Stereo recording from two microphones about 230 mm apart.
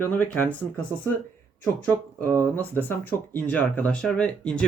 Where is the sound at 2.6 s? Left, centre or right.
Centre.